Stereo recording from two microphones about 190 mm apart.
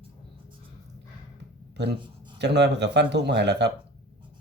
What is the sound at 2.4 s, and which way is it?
Speech, 60° right (ahead or behind).